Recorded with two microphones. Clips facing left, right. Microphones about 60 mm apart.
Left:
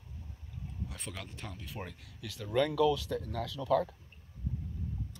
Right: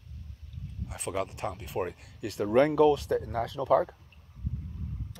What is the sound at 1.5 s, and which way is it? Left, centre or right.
Speech, right.